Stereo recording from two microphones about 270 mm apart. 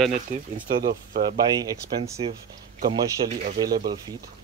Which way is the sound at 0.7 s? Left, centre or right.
Centre.